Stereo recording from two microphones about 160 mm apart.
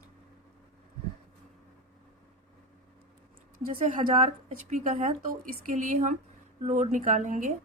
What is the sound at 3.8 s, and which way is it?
A woman's voice, 50° right (ahead or behind).